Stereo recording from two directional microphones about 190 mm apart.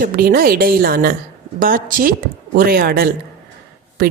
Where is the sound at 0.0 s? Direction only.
50° right (ahead or behind).